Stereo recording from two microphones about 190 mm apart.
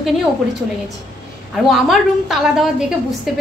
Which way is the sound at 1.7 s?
Centre (ahead or behind).